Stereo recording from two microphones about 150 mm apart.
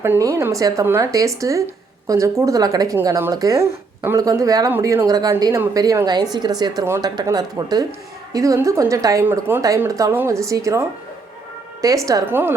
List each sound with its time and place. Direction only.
0.0 s a woman's voice: 15° right (ahead or behind)
12.0 s speech: 20° right (ahead or behind)